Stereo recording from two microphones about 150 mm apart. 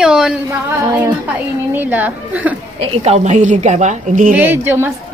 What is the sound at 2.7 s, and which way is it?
A woman's voice, 45° right (ahead or behind).